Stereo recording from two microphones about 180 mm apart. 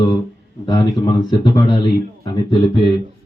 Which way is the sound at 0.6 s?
20° left (ahead or behind).